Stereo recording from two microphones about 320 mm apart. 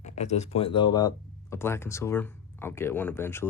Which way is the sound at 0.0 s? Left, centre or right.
Left.